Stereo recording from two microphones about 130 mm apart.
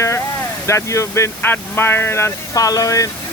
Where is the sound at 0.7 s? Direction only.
20° left (ahead or behind).